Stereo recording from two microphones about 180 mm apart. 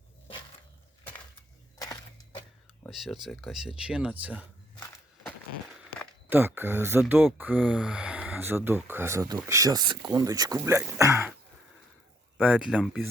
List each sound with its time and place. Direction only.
2.9 s speech: centre (ahead or behind)
6.2 s speech: 10° right (ahead or behind)
12.4 s speech: 5° right (ahead or behind)